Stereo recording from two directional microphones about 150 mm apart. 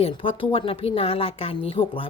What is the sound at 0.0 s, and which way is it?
Speech, 35° left (ahead or behind).